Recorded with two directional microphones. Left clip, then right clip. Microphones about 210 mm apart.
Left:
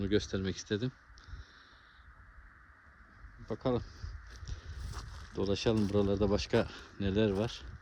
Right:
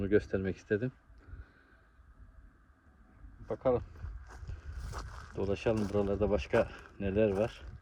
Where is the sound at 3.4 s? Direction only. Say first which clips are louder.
Right 4 dB; 25° left (ahead or behind).